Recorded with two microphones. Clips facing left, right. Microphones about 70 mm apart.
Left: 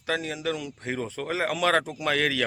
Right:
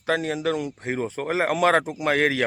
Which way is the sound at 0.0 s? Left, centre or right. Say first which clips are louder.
Right 5 dB; right.